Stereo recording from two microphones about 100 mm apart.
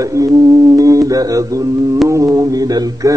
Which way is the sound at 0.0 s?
35° right (ahead or behind).